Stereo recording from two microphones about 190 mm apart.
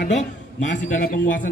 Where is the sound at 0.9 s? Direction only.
45° left (ahead or behind).